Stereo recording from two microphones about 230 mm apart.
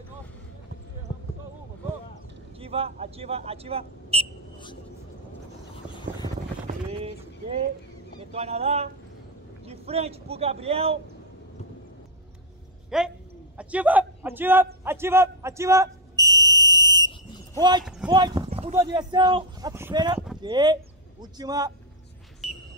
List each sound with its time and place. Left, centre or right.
2.6 s speech: right
5.9 s vehicle: centre
6.7 s a sound: right
8.3 s speech: right
12.9 s a man's voice: centre
14.8 s fire alarm: centre
17.6 s a man's voice: centre